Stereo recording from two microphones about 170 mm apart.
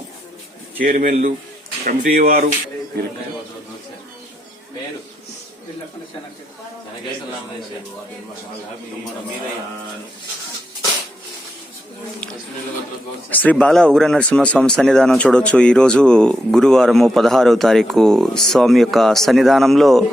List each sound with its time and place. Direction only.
0.8 s a man's voice: 55° right (ahead or behind)
13.3 s speech: 10° left (ahead or behind)